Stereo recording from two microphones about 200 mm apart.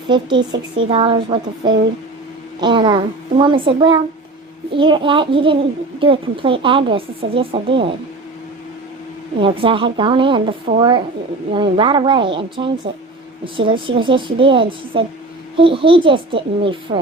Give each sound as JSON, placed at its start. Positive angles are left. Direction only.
{"t": 0.1, "sound": "speech", "side_deg": -25}
{"t": 9.4, "sound": "speech", "side_deg": -25}